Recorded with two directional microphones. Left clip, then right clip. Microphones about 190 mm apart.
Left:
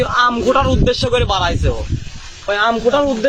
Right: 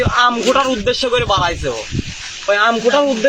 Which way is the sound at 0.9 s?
30° left (ahead or behind).